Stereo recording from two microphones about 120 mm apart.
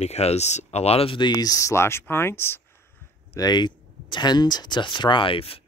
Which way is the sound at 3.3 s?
35° left (ahead or behind).